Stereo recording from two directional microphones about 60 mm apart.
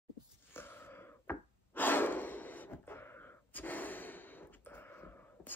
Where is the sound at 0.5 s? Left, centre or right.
Left.